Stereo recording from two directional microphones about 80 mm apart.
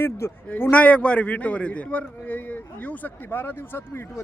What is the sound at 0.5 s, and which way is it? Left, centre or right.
Speech, centre.